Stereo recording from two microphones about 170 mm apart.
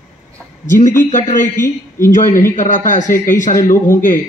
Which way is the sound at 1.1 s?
50° left (ahead or behind).